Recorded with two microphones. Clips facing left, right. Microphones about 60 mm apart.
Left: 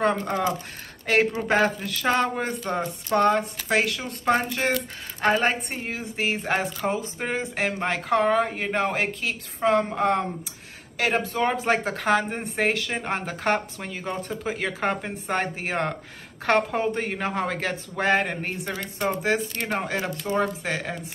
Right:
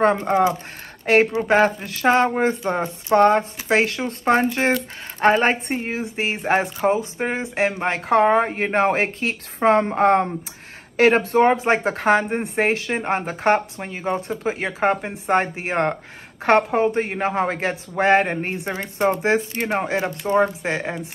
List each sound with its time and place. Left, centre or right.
0.1 s a woman's voice: right